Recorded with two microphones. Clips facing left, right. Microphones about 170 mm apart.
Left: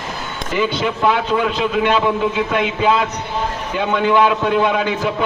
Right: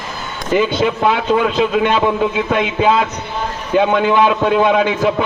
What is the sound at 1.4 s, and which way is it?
Speech, 50° right (ahead or behind).